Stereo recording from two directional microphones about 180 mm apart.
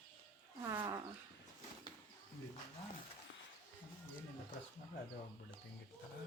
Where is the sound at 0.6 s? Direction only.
15° right (ahead or behind).